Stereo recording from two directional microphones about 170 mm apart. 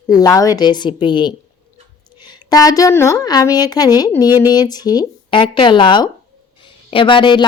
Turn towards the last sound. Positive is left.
turn(degrees=30)  # may be behind; listen again after turning